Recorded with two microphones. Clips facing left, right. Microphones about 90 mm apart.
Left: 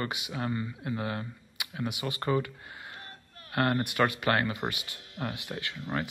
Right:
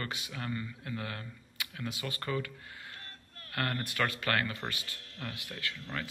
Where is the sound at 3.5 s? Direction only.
25° left (ahead or behind).